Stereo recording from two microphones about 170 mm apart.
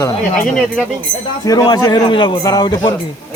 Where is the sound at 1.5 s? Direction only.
25° left (ahead or behind).